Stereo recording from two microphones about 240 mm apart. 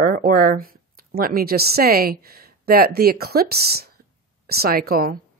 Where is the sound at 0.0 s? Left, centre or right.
Right.